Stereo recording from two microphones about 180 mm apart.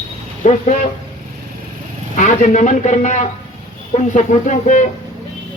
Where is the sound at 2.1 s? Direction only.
45° left (ahead or behind).